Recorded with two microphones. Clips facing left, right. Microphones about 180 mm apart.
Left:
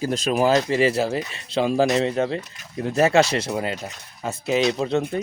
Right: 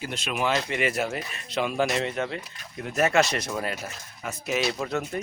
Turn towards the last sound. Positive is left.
turn(degrees=25)  # may be behind; listen again after turning